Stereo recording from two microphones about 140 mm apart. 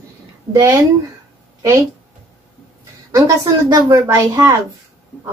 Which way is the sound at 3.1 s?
25° right (ahead or behind).